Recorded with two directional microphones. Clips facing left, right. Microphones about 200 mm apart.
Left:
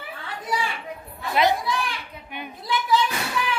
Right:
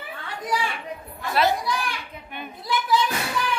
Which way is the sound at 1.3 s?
15° left (ahead or behind).